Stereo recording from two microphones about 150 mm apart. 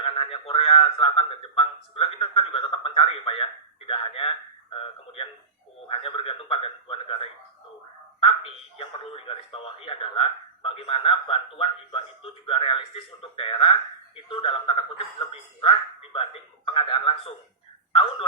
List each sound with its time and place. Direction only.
0.0 s speech: 40° left (ahead or behind)
8.8 s speech: 40° left (ahead or behind)